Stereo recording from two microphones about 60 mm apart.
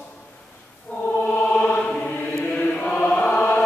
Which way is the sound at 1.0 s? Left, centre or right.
Left.